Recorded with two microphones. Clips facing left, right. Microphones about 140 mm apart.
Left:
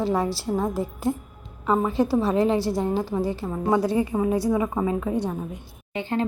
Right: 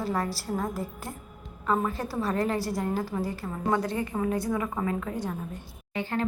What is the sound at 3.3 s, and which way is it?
Speech, 20° left (ahead or behind).